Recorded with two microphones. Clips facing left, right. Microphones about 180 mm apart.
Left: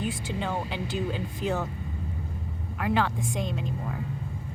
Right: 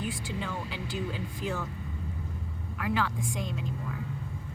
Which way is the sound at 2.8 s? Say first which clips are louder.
Left 4 dB; 25° left (ahead or behind).